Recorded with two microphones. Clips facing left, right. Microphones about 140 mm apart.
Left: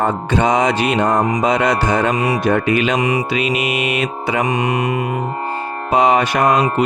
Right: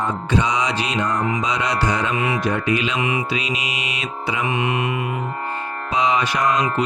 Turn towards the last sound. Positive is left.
turn(degrees=55)  # may be behind; listen again after turning